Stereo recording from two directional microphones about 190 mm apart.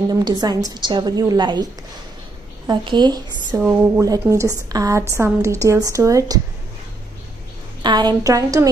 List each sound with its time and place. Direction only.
0.1 s a woman's voice: 20° right (ahead or behind)
7.8 s a woman's voice: 20° right (ahead or behind)